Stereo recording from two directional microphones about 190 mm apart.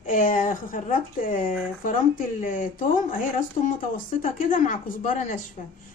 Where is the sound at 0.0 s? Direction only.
45° left (ahead or behind).